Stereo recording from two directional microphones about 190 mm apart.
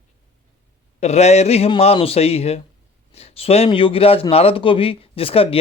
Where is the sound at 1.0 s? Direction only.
35° left (ahead or behind).